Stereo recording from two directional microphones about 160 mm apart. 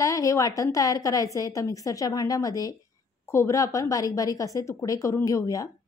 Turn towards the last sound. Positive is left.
turn(degrees=20)  # may be behind; listen again after turning